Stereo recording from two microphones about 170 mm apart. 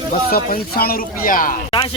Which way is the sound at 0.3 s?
60° left (ahead or behind).